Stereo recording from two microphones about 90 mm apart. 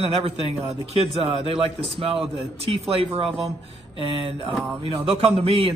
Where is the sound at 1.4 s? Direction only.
90° right.